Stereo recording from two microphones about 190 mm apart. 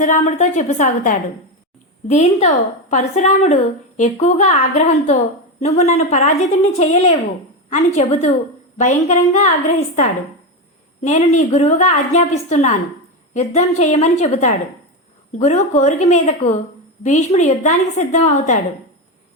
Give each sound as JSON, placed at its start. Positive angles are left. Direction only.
{"t": 0.0, "sound": "a woman's voice", "side_deg": 40}